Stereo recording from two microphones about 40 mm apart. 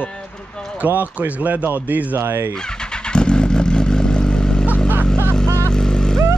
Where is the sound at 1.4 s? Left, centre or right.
Right.